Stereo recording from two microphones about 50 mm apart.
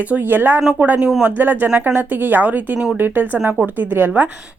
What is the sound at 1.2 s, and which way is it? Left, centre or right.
Speech, right.